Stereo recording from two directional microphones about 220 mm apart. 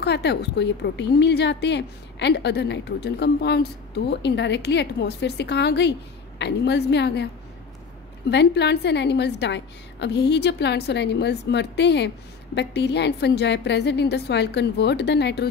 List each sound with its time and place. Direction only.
0.0 s a woman's voice: 50° left (ahead or behind)
8.3 s a woman's voice: 50° left (ahead or behind)